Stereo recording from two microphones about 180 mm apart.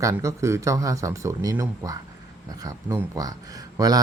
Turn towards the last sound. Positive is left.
turn(degrees=-20)  # may be behind; listen again after turning